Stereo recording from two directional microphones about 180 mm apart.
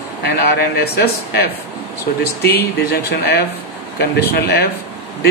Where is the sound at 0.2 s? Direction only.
65° left (ahead or behind).